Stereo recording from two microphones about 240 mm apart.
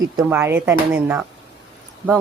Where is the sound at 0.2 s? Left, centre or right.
Centre.